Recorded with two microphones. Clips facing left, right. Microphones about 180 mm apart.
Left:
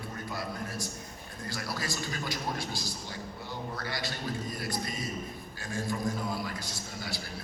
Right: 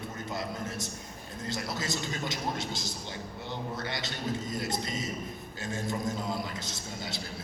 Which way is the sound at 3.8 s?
20° right (ahead or behind).